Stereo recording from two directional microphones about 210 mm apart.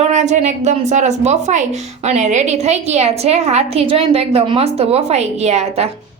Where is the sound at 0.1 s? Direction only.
35° right (ahead or behind).